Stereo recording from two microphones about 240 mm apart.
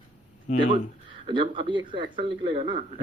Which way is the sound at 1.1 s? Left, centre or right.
Right.